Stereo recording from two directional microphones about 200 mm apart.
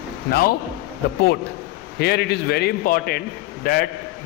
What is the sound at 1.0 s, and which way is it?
A man's voice, 50° left (ahead or behind).